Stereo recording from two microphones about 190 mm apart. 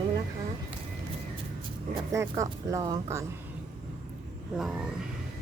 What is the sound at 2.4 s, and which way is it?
Speech, 20° right (ahead or behind).